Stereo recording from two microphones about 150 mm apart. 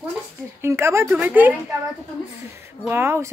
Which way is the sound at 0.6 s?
15° right (ahead or behind).